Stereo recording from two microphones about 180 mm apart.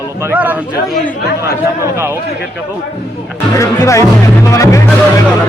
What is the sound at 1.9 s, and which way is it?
Speech, 15° right (ahead or behind).